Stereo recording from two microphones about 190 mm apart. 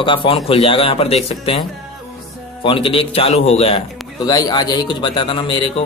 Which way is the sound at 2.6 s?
30° left (ahead or behind).